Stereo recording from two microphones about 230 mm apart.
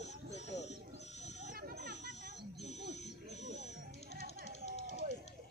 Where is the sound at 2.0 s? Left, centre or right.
Left.